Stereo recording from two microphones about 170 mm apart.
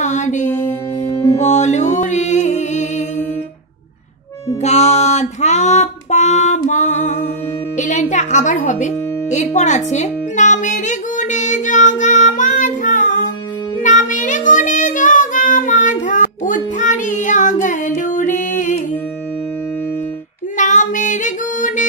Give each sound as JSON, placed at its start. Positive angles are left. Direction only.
{"t": 0.0, "sound": "music", "side_deg": 45}
{"t": 0.7, "sound": "music", "side_deg": 20}
{"t": 1.4, "sound": "music", "side_deg": 45}
{"t": 4.6, "sound": "music", "side_deg": 40}
{"t": 13.7, "sound": "child singing", "side_deg": 50}
{"t": 20.5, "sound": "child singing", "side_deg": 50}